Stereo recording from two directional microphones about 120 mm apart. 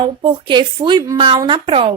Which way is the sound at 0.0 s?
45° right (ahead or behind).